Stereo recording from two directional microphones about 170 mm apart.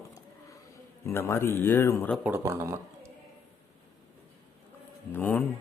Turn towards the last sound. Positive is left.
turn(degrees=10)  # may be behind; listen again after turning